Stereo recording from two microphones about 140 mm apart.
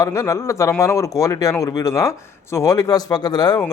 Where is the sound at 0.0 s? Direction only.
25° left (ahead or behind).